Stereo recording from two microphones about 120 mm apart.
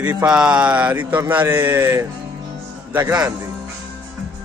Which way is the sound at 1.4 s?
20° right (ahead or behind).